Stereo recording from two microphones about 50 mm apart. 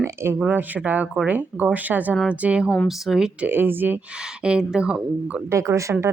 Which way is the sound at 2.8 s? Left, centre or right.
Centre.